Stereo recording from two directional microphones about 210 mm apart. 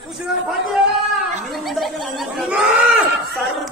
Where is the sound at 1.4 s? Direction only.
Centre (ahead or behind).